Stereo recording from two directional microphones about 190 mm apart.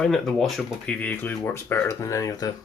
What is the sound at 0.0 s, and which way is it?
Speech, centre (ahead or behind).